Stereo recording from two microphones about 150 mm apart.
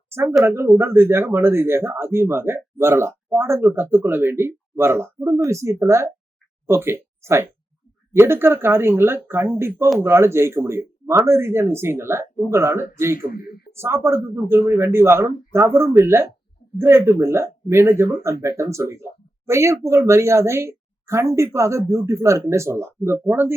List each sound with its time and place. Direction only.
0.1 s speech: 15° right (ahead or behind)
13.1 s speech: 75° left (ahead or behind)
13.8 s speech: 15° right (ahead or behind)